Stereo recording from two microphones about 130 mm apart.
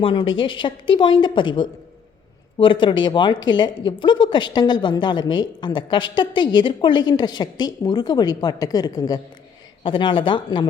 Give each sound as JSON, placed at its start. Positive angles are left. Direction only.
{"t": 0.0, "sound": "speech", "side_deg": 40}
{"t": 9.8, "sound": "speech", "side_deg": 40}